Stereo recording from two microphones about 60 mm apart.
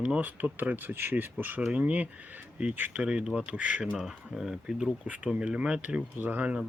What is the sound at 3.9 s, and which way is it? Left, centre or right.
Speech, centre.